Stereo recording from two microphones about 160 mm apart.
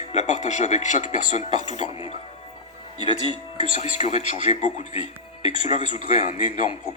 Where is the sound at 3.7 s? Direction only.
45° left (ahead or behind).